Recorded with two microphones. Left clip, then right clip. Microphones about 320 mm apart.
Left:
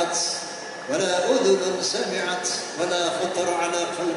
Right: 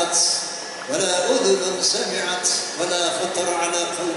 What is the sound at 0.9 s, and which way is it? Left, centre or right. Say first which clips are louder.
A man's voice: right 1 dB; centre.